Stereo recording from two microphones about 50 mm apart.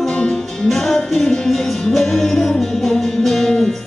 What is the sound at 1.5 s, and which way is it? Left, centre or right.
Music, centre.